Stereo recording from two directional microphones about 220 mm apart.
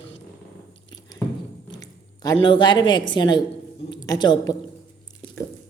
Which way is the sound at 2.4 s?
20° left (ahead or behind).